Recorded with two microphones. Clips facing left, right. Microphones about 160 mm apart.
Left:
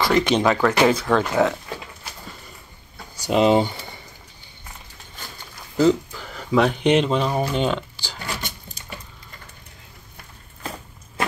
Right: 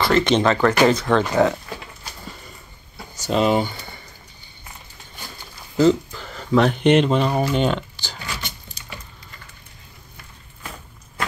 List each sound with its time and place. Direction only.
0.0 s speech: 10° left (ahead or behind)
3.2 s speech: 15° left (ahead or behind)
5.8 s speech: 5° left (ahead or behind)